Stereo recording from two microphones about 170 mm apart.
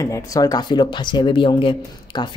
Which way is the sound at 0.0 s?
20° left (ahead or behind).